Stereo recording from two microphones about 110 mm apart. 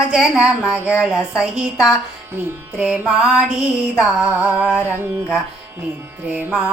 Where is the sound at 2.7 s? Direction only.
10° right (ahead or behind).